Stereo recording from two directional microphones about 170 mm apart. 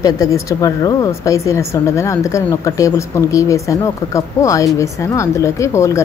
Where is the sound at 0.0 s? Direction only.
20° left (ahead or behind).